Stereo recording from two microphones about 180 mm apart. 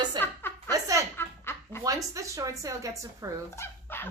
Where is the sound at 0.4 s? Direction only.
10° left (ahead or behind).